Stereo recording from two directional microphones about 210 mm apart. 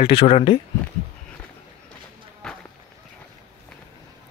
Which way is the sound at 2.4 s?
5° left (ahead or behind).